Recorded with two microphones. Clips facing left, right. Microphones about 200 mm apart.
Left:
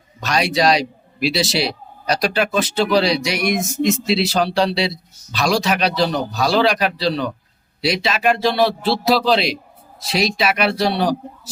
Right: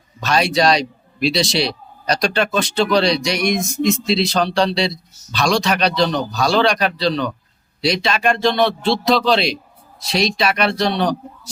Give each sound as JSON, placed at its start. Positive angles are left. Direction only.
{"t": 0.3, "sound": "a man's voice", "side_deg": 0}